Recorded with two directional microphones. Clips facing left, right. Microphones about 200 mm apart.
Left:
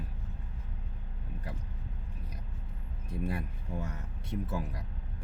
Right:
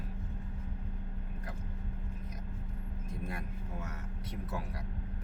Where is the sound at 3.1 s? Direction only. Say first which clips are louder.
Left 6 dB; 30° left (ahead or behind).